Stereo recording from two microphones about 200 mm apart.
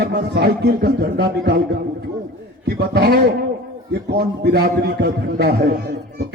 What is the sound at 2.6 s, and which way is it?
A man's voice, 50° right (ahead or behind).